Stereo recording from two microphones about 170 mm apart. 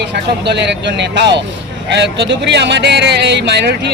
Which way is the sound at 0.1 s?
90° right.